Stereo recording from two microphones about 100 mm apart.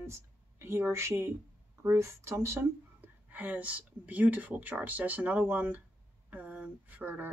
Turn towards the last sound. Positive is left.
turn(degrees=-15)  # may be behind; listen again after turning